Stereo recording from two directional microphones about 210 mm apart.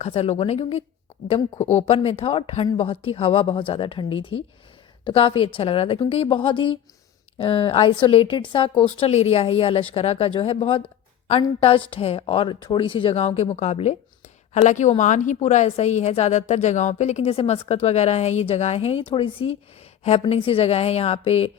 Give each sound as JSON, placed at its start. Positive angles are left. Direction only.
{"t": 0.0, "sound": "a woman's voice", "side_deg": 30}